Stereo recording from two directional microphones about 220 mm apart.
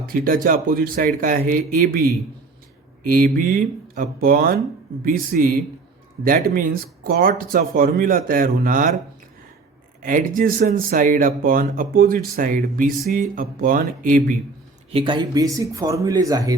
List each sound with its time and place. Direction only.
0.0 s speech: 40° right (ahead or behind)
3.3 s speech: 40° right (ahead or behind)
10.0 s speech: 35° right (ahead or behind)
14.9 s speech: 20° right (ahead or behind)